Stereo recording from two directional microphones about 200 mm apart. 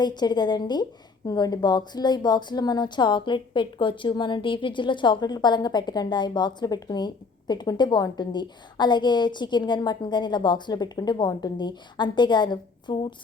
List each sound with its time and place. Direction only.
0.0 s a woman's voice: 20° left (ahead or behind)